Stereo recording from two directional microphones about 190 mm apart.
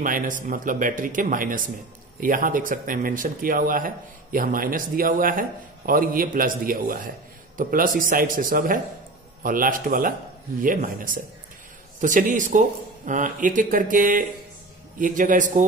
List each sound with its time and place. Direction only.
0.0 s speech: 45° right (ahead or behind)